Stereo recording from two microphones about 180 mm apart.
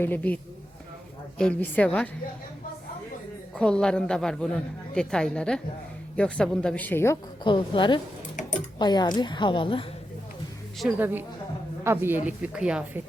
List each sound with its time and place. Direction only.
0.0 s a woman's voice: 10° left (ahead or behind)
1.4 s a woman's voice: 5° left (ahead or behind)
3.5 s a woman's voice: 5° left (ahead or behind)
7.4 s a woman's voice: 25° left (ahead or behind)
10.8 s a woman's voice: 5° right (ahead or behind)